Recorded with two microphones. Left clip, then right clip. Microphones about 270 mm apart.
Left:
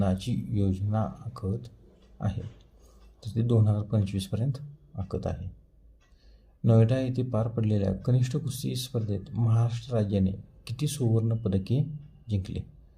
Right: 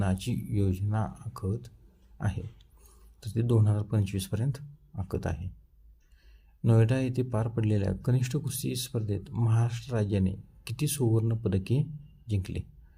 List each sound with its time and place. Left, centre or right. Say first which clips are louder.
0.0 s speech: left 3 dB; right
6.6 s speech: left 2 dB; right